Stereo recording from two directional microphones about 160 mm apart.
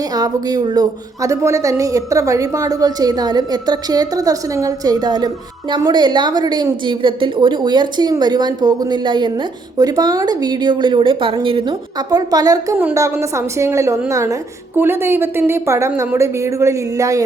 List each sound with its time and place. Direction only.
0.1 s a woman's voice: 25° right (ahead or behind)